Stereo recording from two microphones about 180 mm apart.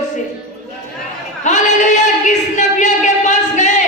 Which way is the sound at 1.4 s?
40° left (ahead or behind).